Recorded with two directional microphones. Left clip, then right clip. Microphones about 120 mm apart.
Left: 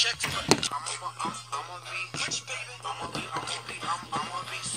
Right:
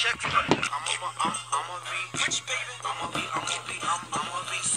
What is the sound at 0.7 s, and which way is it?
Music, 25° right (ahead or behind).